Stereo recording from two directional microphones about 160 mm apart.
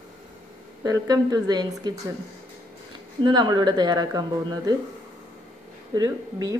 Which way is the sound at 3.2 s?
30° right (ahead or behind).